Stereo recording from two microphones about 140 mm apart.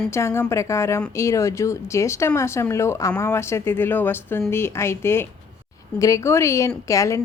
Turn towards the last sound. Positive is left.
turn(degrees=25)  # may be behind; listen again after turning